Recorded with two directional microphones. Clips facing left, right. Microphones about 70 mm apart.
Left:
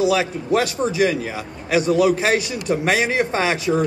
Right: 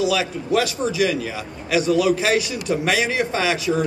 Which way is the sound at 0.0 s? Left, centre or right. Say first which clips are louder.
Left 2 dB; left.